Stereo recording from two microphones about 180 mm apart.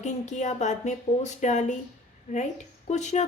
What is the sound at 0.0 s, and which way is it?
A woman's voice, 40° left (ahead or behind).